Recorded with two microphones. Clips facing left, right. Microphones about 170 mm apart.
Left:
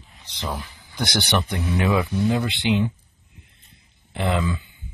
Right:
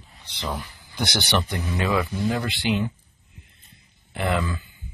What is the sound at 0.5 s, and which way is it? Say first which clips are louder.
Speech: even; centre (ahead or behind).